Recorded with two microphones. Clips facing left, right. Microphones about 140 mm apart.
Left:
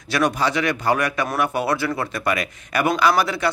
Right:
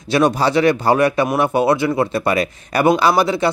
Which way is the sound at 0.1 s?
30° right (ahead or behind).